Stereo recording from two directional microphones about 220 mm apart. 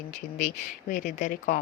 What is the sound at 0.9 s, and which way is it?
Speech, 35° left (ahead or behind).